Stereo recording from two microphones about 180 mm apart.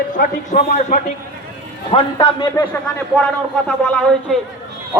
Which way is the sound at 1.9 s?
25° left (ahead or behind).